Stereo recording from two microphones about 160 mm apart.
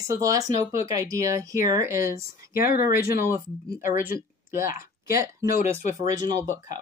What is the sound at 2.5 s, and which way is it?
Speech, 65° left (ahead or behind).